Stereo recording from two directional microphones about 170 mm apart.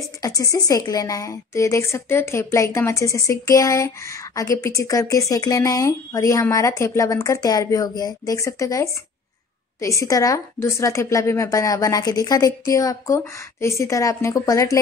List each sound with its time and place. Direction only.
0.2 s a woman's voice: 20° left (ahead or behind)